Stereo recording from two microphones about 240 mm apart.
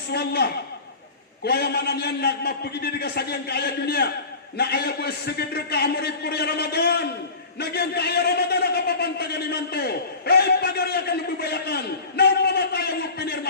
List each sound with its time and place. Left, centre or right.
0.1 s a man's voice: left